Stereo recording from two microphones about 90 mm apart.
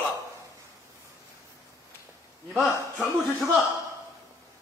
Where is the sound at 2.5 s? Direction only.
5° right (ahead or behind).